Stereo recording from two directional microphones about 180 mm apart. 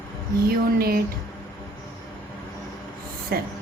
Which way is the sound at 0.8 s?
55° right (ahead or behind).